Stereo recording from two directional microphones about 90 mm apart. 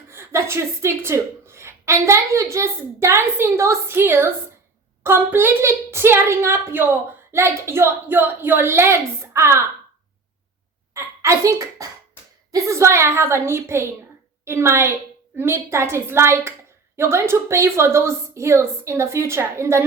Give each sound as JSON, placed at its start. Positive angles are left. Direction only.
{"t": 0.1, "sound": "a woman's voice", "side_deg": -30}
{"t": 10.9, "sound": "a child's voice", "side_deg": -35}